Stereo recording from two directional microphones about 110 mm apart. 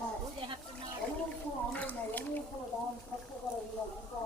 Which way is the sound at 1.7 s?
15° left (ahead or behind).